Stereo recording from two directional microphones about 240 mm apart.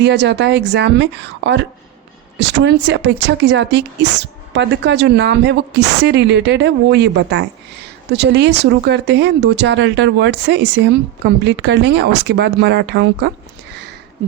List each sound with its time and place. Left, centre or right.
0.0 s speech: right